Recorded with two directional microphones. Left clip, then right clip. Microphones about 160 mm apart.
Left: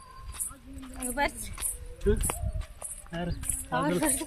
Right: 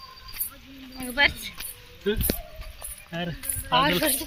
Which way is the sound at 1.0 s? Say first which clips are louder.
Right 8 dB; 15° left (ahead or behind).